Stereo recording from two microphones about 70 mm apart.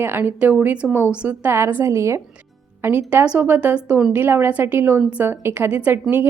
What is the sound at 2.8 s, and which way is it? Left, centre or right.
A woman's voice, right.